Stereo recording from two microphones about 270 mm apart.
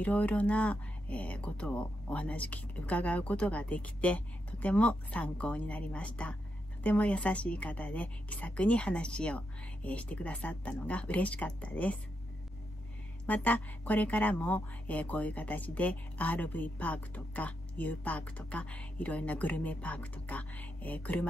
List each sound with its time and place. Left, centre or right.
0.0 s speech: centre
13.3 s speech: centre